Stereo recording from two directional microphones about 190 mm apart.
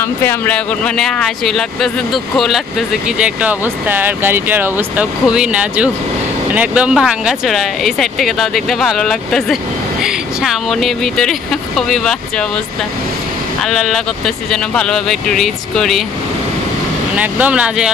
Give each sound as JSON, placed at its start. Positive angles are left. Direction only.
{"t": 0.0, "sound": "speech", "side_deg": 10}
{"t": 13.6, "sound": "speech", "side_deg": 0}
{"t": 17.2, "sound": "speech", "side_deg": -10}